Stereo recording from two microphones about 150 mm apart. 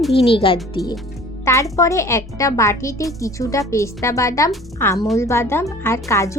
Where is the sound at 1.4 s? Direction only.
20° left (ahead or behind).